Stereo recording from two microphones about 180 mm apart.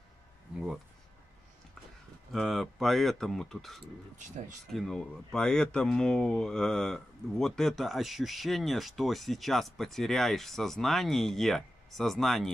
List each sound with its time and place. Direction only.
2.3 s speech: centre (ahead or behind)